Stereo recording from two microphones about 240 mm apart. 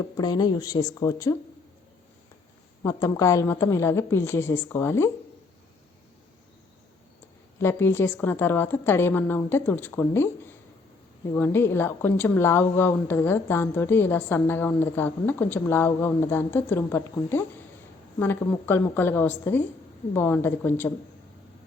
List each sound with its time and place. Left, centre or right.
0.2 s a woman's voice: centre
2.8 s a woman's voice: centre
7.6 s a woman's voice: centre